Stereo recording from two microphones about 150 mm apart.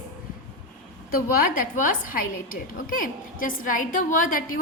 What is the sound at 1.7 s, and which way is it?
A woman's voice, 65° left (ahead or behind).